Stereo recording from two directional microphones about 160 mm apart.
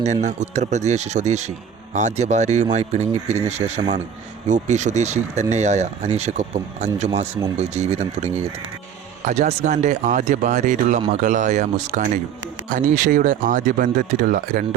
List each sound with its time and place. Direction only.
0.0 s speech: 45° right (ahead or behind)